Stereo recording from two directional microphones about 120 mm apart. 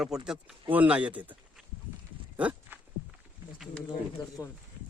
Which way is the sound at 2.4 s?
10° right (ahead or behind).